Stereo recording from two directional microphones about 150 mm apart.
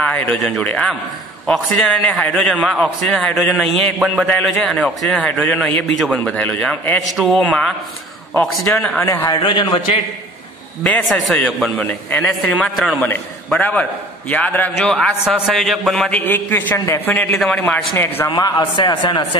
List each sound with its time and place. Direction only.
0.0 s a man's voice: 10° left (ahead or behind); by 9.9 s 30° left (ahead or behind)
10.8 s a man's voice: 10° left (ahead or behind)
17.9 s a man's voice: 15° left (ahead or behind)
18.3 s a man's voice: 30° left (ahead or behind)